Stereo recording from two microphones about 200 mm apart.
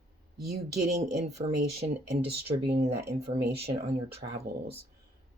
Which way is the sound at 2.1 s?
55° right (ahead or behind).